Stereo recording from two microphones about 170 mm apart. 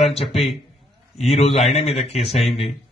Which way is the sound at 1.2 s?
35° left (ahead or behind).